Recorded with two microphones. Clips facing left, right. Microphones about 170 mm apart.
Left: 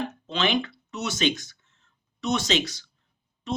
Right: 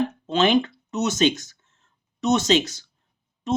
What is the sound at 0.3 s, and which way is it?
Speech, 45° right (ahead or behind).